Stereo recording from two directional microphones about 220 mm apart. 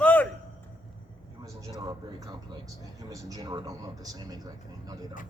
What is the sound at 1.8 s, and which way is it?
Speech, 15° right (ahead or behind).